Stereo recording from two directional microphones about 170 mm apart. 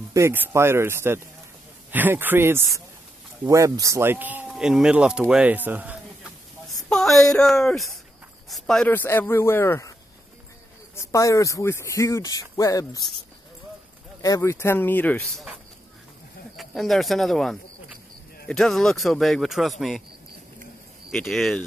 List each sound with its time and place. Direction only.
0.1 s speech: 15° right (ahead or behind)
6.8 s speech: centre (ahead or behind)
11.0 s speech: 20° left (ahead or behind)
14.2 s speech: 20° left (ahead or behind); by 15.5 s centre (ahead or behind)
16.5 s speech: centre (ahead or behind)
21.1 s speech: centre (ahead or behind)